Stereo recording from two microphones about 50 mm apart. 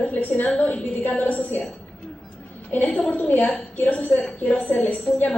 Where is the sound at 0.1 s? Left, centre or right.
Left.